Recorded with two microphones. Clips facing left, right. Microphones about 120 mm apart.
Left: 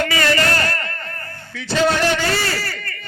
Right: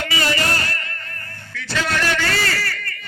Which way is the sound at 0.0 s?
45° left (ahead or behind).